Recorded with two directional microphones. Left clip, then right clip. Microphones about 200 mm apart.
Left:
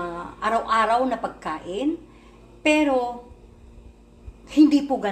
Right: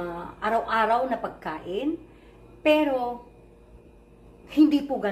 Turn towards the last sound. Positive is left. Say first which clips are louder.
# left 3 dB
turn(degrees=25)  # may be behind; listen again after turning